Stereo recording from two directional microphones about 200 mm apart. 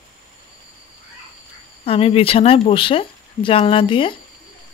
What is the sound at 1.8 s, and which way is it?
Speech, 30° left (ahead or behind).